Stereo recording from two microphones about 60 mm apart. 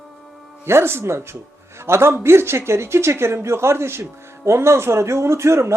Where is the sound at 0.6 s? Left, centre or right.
Right.